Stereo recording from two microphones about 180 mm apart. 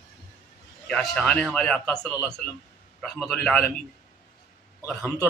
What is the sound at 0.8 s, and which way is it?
A man's voice, 5° left (ahead or behind).